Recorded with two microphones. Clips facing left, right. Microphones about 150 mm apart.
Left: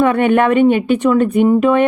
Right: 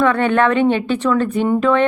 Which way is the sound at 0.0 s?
15° left (ahead or behind).